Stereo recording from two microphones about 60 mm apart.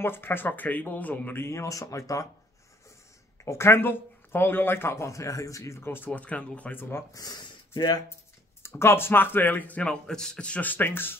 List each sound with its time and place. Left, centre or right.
0.0 s speech: left
1.4 s speech: left
3.4 s speech: left
5.8 s speech: left
6.2 s speech: left
6.8 s speech: left
7.2 s speech: left
8.6 s speech: left
10.0 s speech: centre; by 11.1 s left